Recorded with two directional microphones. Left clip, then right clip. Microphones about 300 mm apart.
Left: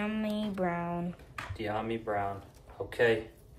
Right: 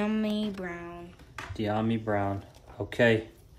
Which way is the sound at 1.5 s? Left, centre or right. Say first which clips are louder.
Right 4 dB; centre.